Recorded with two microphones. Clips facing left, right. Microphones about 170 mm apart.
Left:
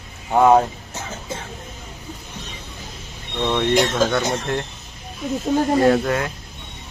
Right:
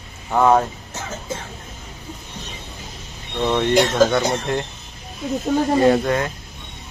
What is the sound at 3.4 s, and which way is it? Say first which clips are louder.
Speech: right 1 dB; centre (ahead or behind).